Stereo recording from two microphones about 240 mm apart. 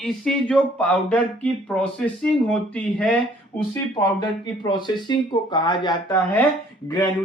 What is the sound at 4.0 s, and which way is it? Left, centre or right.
Speech, centre.